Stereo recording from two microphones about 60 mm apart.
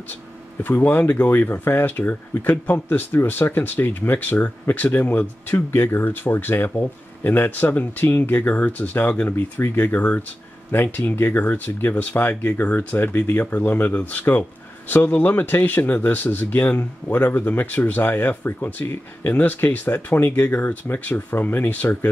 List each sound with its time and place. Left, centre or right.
0.7 s speech: left
9.3 s speech: left